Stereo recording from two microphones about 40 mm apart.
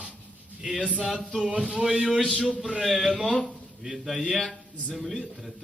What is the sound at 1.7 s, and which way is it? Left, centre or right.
A man's voice, centre.